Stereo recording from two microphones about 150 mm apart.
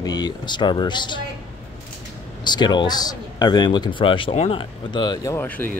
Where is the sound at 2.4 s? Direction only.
30° left (ahead or behind).